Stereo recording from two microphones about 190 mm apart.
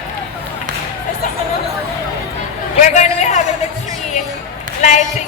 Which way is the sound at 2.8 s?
40° left (ahead or behind).